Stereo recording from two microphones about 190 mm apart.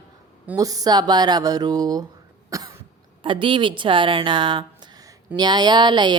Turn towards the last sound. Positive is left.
turn(degrees=-25)  # may be behind; listen again after turning